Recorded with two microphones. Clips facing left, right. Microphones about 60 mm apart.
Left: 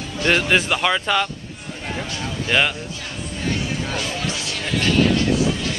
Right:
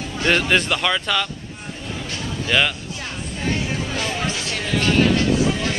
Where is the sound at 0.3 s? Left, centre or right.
Centre.